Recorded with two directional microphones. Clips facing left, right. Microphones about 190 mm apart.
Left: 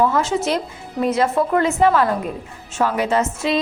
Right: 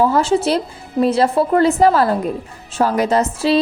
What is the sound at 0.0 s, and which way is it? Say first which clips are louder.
A woman's voice: right 3 dB; 30° right (ahead or behind).